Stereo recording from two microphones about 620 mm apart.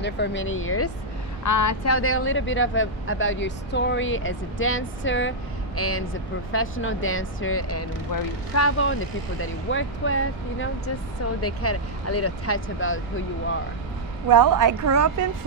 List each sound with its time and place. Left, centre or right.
0.0 s speech: centre
14.3 s a woman's voice: right